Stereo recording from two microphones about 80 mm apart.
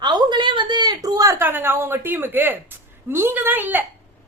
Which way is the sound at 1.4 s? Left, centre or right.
Right.